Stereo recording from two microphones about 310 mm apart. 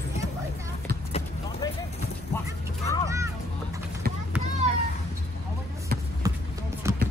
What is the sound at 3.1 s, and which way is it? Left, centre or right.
Children playing, centre.